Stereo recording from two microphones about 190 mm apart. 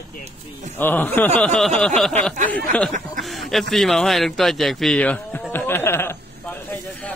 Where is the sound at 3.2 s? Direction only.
Centre (ahead or behind).